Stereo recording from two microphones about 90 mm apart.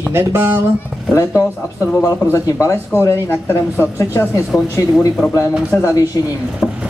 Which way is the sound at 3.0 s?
25° left (ahead or behind).